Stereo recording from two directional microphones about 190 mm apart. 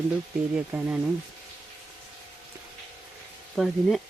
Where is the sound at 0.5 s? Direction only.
5° right (ahead or behind).